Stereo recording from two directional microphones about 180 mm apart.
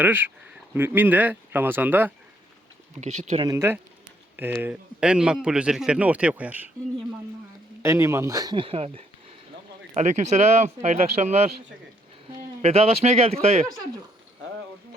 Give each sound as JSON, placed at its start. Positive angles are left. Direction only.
{"t": 0.0, "sound": "a man's voice", "side_deg": -10}
{"t": 3.0, "sound": "speech", "side_deg": -40}
{"t": 3.4, "sound": "a man's voice", "side_deg": -15}
{"t": 7.8, "sound": "speech", "side_deg": -15}
{"t": 12.6, "sound": "speech", "side_deg": -35}